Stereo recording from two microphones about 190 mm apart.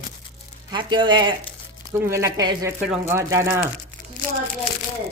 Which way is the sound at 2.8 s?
10° right (ahead or behind).